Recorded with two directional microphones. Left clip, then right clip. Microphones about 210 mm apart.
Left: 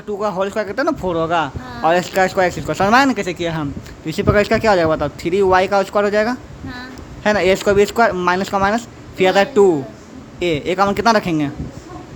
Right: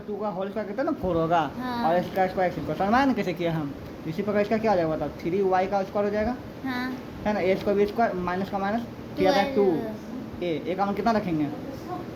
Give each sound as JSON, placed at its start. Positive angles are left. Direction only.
{"t": 0.2, "sound": "a man's voice", "side_deg": 40}
{"t": 1.1, "sound": "speech", "side_deg": 25}
{"t": 1.8, "sound": "a man's voice", "side_deg": 40}
{"t": 4.1, "sound": "a man's voice", "side_deg": 40}